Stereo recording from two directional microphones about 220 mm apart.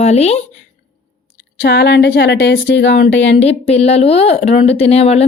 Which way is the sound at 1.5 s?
50° left (ahead or behind).